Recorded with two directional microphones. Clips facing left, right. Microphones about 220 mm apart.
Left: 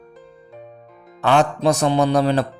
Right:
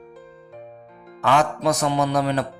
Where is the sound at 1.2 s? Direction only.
30° left (ahead or behind).